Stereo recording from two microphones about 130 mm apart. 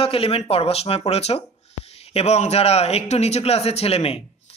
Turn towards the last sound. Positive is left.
turn(degrees=50)  # may be behind; listen again after turning